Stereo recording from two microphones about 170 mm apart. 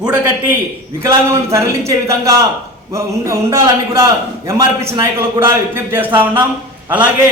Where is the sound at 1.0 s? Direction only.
15° right (ahead or behind).